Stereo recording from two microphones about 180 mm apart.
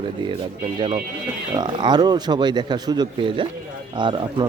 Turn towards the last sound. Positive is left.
turn(degrees=-25)  # may be behind; listen again after turning